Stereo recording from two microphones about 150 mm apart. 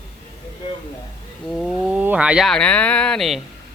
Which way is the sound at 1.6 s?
10° right (ahead or behind).